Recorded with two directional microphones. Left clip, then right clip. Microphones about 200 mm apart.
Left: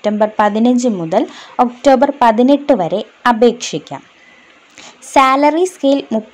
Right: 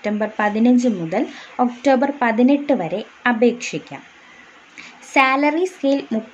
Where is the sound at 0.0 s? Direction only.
25° left (ahead or behind).